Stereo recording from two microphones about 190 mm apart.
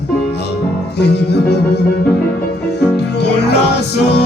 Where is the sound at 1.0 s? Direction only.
60° left (ahead or behind).